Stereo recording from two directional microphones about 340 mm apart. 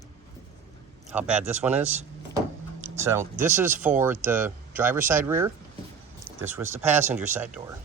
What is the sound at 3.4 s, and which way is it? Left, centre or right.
Speech, centre.